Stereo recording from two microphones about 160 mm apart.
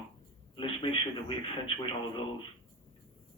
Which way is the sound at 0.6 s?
30° left (ahead or behind).